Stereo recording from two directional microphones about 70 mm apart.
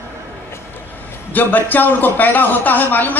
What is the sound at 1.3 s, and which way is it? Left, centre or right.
A man's voice, left.